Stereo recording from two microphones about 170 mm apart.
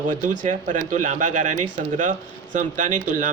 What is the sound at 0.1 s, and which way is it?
A man's voice, 50° right (ahead or behind).